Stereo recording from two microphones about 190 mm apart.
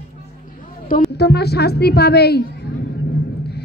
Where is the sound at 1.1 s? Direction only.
60° left (ahead or behind).